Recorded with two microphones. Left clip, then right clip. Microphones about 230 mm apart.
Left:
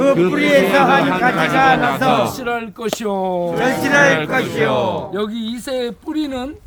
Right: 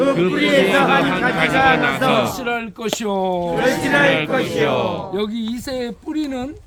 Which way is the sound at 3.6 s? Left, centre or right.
Left.